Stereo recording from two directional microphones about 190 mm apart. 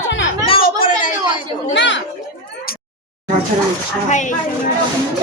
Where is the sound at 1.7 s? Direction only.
70° left (ahead or behind).